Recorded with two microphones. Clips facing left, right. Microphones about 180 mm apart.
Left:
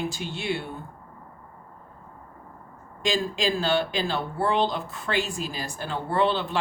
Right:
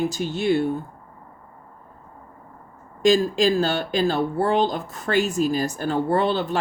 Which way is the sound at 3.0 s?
45° right (ahead or behind).